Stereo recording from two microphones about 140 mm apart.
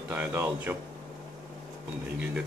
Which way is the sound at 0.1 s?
15° right (ahead or behind).